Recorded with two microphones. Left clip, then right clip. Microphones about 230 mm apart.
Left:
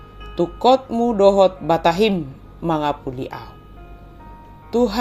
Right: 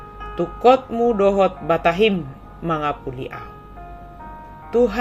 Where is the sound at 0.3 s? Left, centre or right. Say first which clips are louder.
Even; centre.